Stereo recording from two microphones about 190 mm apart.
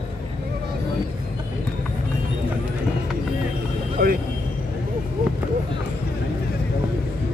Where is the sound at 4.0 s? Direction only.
50° right (ahead or behind).